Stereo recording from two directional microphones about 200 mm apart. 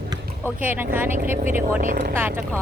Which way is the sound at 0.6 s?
10° right (ahead or behind).